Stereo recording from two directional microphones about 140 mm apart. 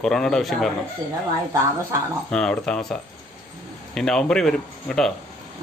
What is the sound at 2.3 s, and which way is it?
Speech, 5° left (ahead or behind).